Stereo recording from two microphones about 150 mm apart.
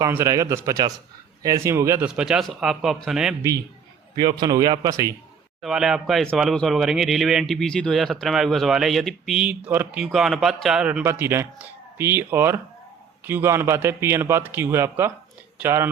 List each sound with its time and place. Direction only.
0.0 s a man's voice: 20° right (ahead or behind)
2.0 s speech: 5° right (ahead or behind)
4.1 s a man's voice: 30° right (ahead or behind)
5.6 s speech: 5° right (ahead or behind)